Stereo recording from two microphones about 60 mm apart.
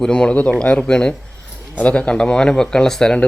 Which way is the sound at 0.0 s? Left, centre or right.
Centre.